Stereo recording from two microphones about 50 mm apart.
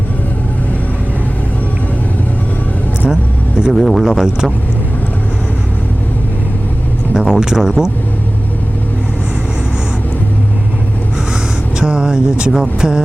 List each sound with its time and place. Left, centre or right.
3.7 s speech: centre
7.2 s speech: centre
11.8 s speech: centre